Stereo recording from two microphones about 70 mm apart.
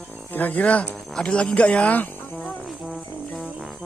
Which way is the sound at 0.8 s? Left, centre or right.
Centre.